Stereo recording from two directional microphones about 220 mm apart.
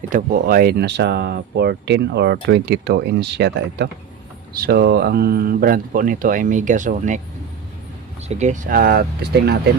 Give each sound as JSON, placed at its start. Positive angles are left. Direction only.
{"t": 0.1, "sound": "speech", "side_deg": -35}
{"t": 8.3, "sound": "speech", "side_deg": -30}